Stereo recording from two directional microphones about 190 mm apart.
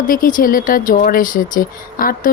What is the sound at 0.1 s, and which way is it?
Speech, 45° left (ahead or behind).